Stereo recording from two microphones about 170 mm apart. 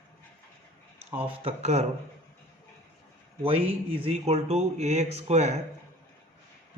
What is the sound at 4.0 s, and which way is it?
A man's voice, 35° right (ahead or behind).